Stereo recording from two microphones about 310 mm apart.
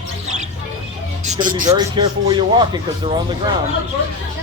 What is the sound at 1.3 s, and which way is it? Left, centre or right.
Speech, right.